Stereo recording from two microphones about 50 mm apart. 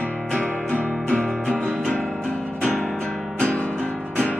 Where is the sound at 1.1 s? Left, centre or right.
Centre.